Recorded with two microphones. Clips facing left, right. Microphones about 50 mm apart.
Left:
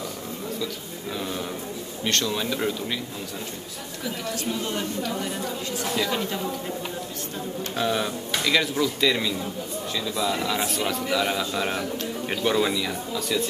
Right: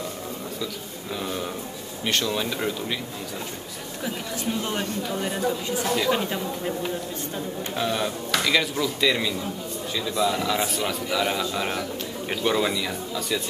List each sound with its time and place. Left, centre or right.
1.1 s a man's voice: centre
4.6 s speech: centre
7.7 s a man's voice: centre